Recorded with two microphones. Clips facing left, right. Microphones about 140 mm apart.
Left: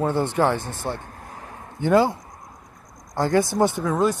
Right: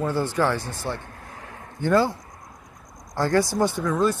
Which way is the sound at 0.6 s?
55° left (ahead or behind).